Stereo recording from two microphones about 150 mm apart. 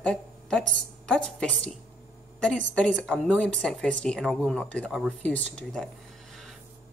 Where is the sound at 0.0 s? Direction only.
5° left (ahead or behind).